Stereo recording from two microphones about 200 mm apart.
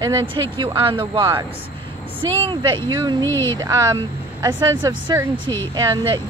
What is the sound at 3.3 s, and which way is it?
Speech, 10° left (ahead or behind).